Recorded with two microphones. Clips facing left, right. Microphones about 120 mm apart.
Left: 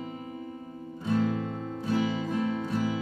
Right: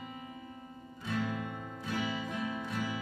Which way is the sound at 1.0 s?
35° left (ahead or behind).